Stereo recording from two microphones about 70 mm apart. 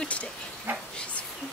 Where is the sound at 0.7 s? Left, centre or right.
Right.